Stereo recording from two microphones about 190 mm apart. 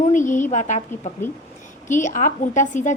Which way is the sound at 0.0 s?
40° left (ahead or behind).